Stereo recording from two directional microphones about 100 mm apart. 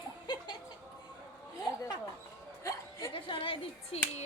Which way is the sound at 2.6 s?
30° left (ahead or behind).